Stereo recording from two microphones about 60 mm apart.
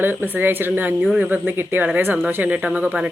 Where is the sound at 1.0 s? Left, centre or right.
Centre.